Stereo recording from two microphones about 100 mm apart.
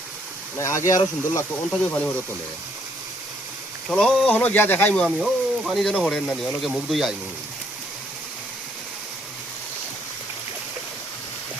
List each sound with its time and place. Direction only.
0.5 s speech: 30° left (ahead or behind)
1.8 s speech: 10° left (ahead or behind)
3.8 s speech: 5° left (ahead or behind)
4.3 s speech: 15° left (ahead or behind)
4.9 s speech: centre (ahead or behind)
6.1 s speech: 10° left (ahead or behind)
6.7 s speech: centre (ahead or behind)